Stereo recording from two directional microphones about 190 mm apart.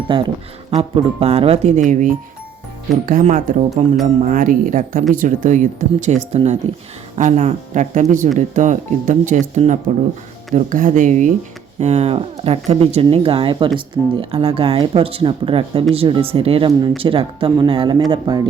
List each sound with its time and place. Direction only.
0.1 s speech: 25° right (ahead or behind)